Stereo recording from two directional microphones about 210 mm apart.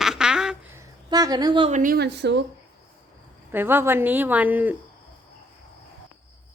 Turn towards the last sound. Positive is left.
turn(degrees=-10)  # may be behind; listen again after turning